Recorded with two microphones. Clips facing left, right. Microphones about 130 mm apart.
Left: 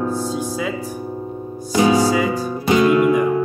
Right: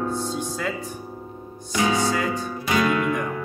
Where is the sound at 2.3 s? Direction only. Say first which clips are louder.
Left 7 dB; 30° left (ahead or behind).